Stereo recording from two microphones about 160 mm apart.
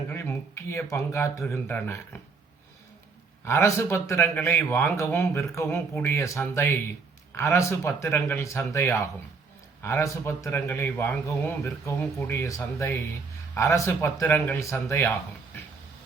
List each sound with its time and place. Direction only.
0.1 s speech: 15° left (ahead or behind)
3.4 s a man's voice: 15° left (ahead or behind)